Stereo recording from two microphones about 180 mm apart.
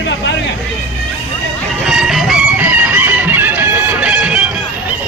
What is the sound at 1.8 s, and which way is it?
Chicken, centre (ahead or behind).